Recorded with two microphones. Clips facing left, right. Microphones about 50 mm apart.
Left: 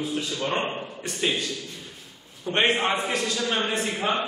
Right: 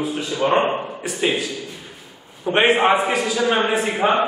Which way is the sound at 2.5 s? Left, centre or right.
Centre.